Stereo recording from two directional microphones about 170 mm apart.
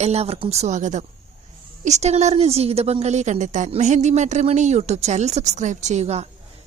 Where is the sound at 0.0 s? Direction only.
40° right (ahead or behind).